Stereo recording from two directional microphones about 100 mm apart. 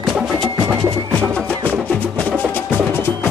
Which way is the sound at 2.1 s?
15° left (ahead or behind).